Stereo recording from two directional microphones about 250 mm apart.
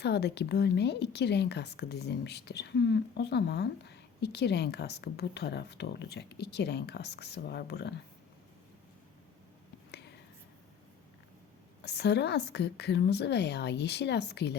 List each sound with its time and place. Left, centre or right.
0.0 s speech: left
11.8 s a woman's voice: left